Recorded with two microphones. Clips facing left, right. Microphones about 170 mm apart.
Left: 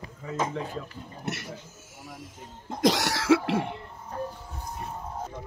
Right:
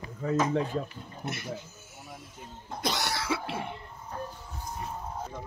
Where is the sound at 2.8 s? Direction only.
90° left.